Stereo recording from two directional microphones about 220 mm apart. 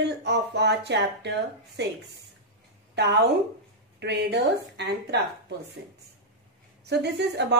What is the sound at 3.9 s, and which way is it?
Speech, 50° right (ahead or behind).